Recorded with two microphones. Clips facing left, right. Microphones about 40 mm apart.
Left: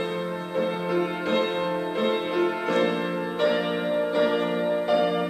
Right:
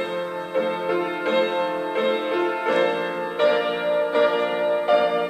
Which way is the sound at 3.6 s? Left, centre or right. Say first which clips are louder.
Right 3 dB; right.